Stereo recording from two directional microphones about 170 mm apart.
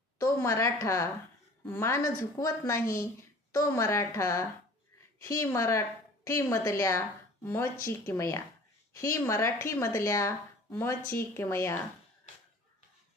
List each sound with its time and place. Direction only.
0.2 s a woman's voice: 15° left (ahead or behind)